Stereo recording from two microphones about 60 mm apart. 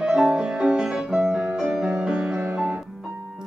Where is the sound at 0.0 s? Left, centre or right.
Centre.